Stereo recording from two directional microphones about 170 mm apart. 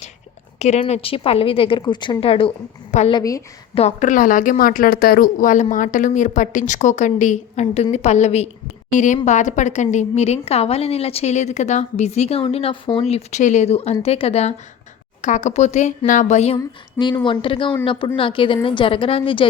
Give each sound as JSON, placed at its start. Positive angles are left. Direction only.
{"t": 0.6, "sound": "a woman's voice", "side_deg": 40}
{"t": 3.1, "sound": "speech", "side_deg": 20}
{"t": 3.8, "sound": "a woman's voice", "side_deg": 45}
{"t": 16.6, "sound": "a woman's voice", "side_deg": 25}